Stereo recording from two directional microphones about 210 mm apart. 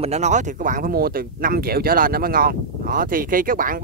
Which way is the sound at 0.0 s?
30° right (ahead or behind).